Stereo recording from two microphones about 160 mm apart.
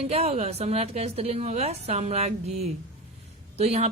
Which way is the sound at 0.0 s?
40° right (ahead or behind).